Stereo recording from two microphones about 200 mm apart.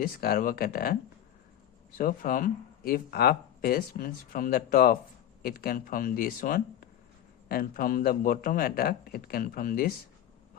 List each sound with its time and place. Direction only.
0.0 s speech: 45° left (ahead or behind)
2.0 s speech: 45° left (ahead or behind)